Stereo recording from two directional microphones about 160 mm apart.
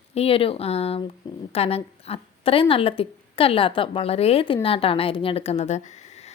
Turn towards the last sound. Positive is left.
turn(degrees=45)  # may be behind; listen again after turning